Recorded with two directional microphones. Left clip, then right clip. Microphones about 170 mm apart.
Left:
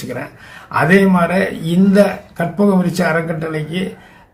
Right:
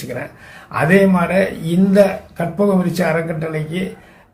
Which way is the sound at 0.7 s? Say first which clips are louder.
Left 1 dB; 15° left (ahead or behind).